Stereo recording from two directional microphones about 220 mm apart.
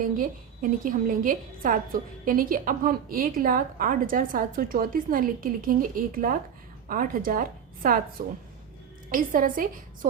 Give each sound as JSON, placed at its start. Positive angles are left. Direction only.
{"t": 0.2, "sound": "a woman's voice", "side_deg": -40}
{"t": 9.0, "sound": "a woman's voice", "side_deg": -40}